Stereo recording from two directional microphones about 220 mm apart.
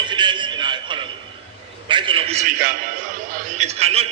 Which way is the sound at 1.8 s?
20° right (ahead or behind).